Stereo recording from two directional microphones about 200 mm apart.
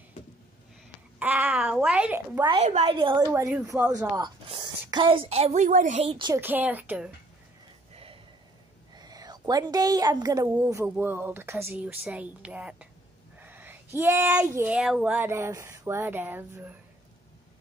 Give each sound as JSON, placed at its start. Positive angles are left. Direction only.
{"t": 1.2, "sound": "a woman's voice", "side_deg": -10}
{"t": 2.5, "sound": "a woman's voice", "side_deg": -30}
{"t": 3.3, "sound": "a woman's voice", "side_deg": -15}
{"t": 4.2, "sound": "a woman's voice", "side_deg": -20}
{"t": 6.4, "sound": "a woman's voice", "side_deg": -10}
{"t": 7.9, "sound": "a sound", "side_deg": -30}
{"t": 8.9, "sound": "a woman's voice", "side_deg": -20}